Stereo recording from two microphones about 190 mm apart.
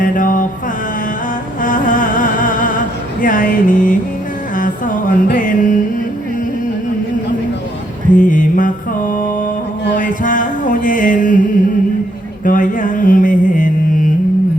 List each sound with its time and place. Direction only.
0.0 s mantra: 45° left (ahead or behind)
1.6 s music: 45° left (ahead or behind)
8.1 s mantra: 45° left (ahead or behind)
10.0 s music: 45° left (ahead or behind)
12.5 s mantra: 45° left (ahead or behind)